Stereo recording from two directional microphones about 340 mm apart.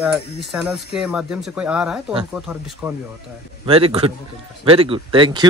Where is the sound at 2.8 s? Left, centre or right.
Centre.